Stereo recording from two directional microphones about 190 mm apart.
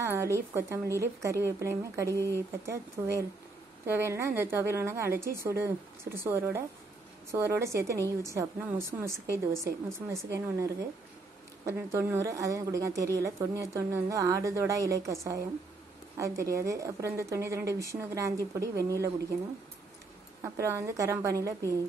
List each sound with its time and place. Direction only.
0.0 s a woman's voice: 15° right (ahead or behind)
16.2 s a woman's voice: 15° right (ahead or behind)
20.4 s a woman's voice: 15° right (ahead or behind)